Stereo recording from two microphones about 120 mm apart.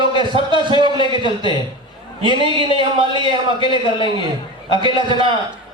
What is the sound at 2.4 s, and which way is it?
A man's voice, 45° right (ahead or behind).